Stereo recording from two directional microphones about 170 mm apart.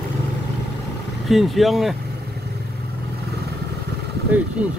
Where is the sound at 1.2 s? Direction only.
Centre (ahead or behind).